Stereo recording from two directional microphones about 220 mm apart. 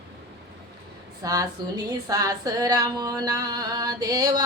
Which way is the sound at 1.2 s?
15° right (ahead or behind).